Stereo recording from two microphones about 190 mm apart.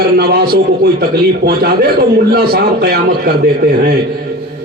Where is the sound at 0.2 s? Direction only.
55° right (ahead or behind).